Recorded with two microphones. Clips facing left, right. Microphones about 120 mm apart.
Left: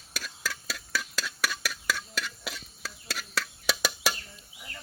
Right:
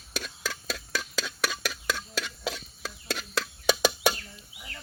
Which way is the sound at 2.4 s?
Centre (ahead or behind).